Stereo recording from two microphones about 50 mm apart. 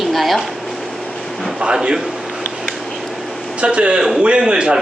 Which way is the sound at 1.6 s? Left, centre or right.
Centre.